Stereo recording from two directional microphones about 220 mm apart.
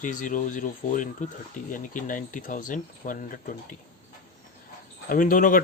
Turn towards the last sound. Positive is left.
turn(degrees=40)  # may be behind; listen again after turning